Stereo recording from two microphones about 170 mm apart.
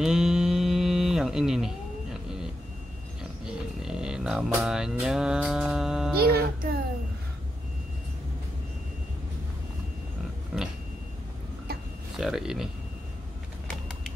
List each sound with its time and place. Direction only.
0.0 s a sound: 5° right (ahead or behind)
3.8 s music: 5° right (ahead or behind)
6.2 s music: 65° right (ahead or behind)
10.5 s pig: 5° right (ahead or behind)
12.2 s speech: centre (ahead or behind)